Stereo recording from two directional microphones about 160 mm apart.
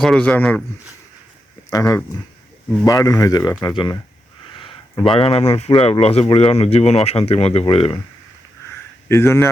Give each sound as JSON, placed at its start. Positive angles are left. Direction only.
{"t": 0.0, "sound": "speech", "side_deg": 5}
{"t": 1.7, "sound": "speech", "side_deg": 20}
{"t": 4.9, "sound": "speech", "side_deg": 35}
{"t": 9.0, "sound": "speech", "side_deg": 15}